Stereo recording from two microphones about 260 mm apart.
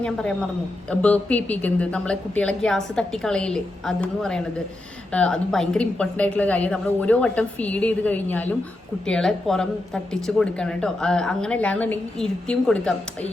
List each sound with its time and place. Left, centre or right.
0.0 s a woman's voice: centre